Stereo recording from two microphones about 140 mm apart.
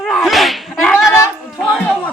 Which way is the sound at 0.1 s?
Centre (ahead or behind).